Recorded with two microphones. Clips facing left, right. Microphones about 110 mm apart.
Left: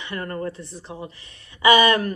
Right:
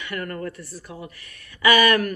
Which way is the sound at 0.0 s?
25° left (ahead or behind).